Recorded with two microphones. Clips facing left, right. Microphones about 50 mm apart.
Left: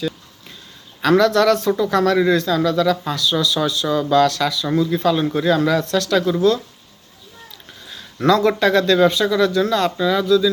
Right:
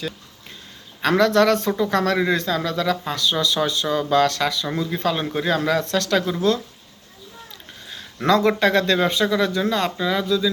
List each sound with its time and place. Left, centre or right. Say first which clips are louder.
1.0 s speech: left 2 dB; right
2.1 s speech: left 5 dB; right
4.6 s speech: left 5 dB; right
8.2 s speech: left 2 dB; right